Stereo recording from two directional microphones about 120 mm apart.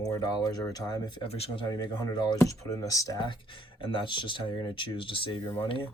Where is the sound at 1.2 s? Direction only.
50° left (ahead or behind).